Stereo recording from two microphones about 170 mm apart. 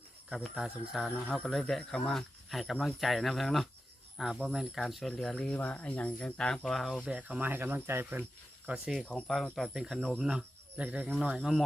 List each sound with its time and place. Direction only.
0.3 s speech: centre (ahead or behind)